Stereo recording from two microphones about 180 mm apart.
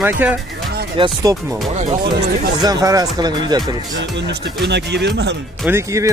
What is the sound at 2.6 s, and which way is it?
Speech, 20° right (ahead or behind).